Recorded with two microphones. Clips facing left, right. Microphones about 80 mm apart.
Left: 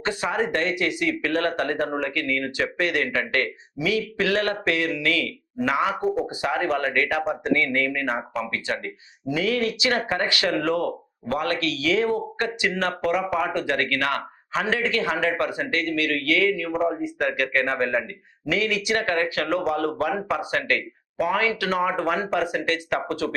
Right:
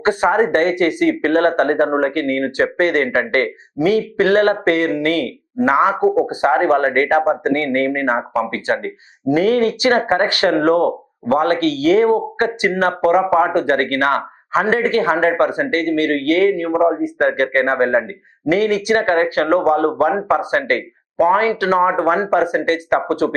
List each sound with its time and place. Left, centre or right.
0.0 s speech: right
6.0 s speech: centre
6.2 s speech: right